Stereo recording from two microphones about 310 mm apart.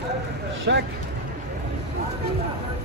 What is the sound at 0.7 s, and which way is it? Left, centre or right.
Speech, right.